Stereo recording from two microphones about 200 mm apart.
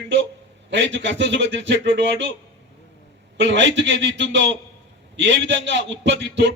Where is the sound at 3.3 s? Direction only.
65° right (ahead or behind).